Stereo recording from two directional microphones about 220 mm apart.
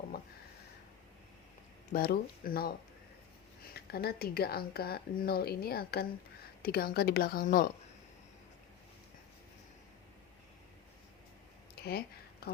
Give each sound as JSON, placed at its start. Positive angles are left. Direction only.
{"t": 1.9, "sound": "speech", "side_deg": 40}
{"t": 3.8, "sound": "speech", "side_deg": 45}